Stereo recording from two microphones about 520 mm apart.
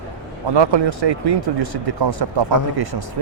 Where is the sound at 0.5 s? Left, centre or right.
Right.